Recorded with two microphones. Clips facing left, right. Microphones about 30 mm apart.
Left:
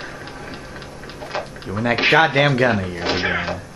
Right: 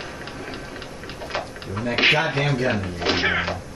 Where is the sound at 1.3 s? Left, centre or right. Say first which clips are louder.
Left 2 dB; centre.